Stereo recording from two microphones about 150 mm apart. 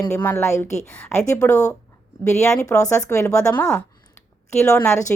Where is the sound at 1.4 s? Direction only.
15° left (ahead or behind).